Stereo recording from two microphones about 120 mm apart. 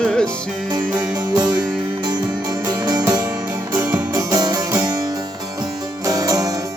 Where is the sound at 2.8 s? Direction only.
35° right (ahead or behind).